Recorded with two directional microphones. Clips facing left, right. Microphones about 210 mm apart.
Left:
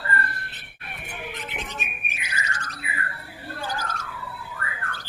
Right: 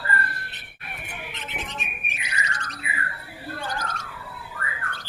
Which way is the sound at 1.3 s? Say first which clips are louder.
Left 3 dB; 25° right (ahead or behind).